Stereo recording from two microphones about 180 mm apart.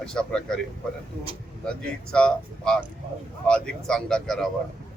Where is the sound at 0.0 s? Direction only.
5° left (ahead or behind).